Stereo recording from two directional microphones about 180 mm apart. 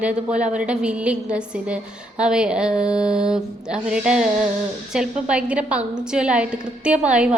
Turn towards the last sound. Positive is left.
turn(degrees=-5)  # may be behind; listen again after turning